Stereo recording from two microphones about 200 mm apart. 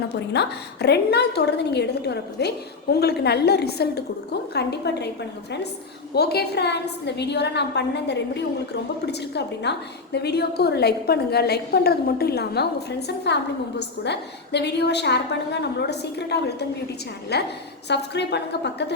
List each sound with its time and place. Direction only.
0.3 s a woman's voice: 55° left (ahead or behind)
6.1 s a woman's voice: 55° left (ahead or behind)